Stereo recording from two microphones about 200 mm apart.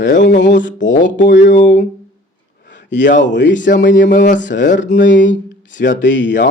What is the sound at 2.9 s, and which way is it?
Speech, 65° left (ahead or behind).